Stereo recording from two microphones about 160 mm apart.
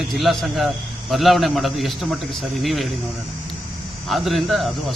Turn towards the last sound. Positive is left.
turn(degrees=0)  # may be behind; listen again after turning